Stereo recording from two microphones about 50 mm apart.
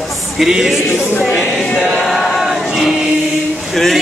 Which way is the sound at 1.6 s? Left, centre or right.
Centre.